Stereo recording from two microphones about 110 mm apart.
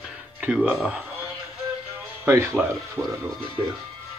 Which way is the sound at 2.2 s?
20° right (ahead or behind).